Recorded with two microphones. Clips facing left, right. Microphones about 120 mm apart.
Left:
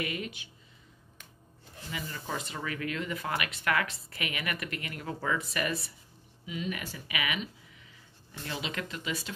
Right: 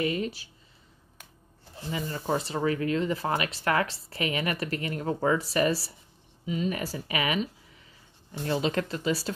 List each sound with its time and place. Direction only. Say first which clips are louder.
0.0 s speech: right 7 dB; 30° right (ahead or behind)
1.9 s speech: right 8 dB; 35° right (ahead or behind)
8.5 s speech: right 9 dB; 40° right (ahead or behind)